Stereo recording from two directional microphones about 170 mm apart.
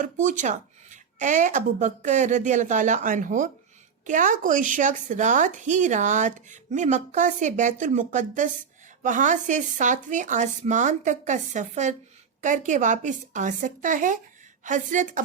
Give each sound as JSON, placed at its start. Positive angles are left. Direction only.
{"t": 0.0, "sound": "a woman's voice", "side_deg": -45}